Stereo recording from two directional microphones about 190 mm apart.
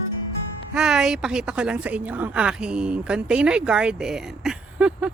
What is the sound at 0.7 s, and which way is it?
A woman's voice, 5° right (ahead or behind).